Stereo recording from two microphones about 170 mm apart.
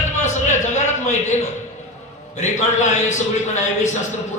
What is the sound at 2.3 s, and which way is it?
Speech, 45° left (ahead or behind).